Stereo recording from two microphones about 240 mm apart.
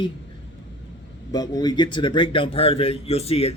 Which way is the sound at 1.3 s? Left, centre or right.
Centre.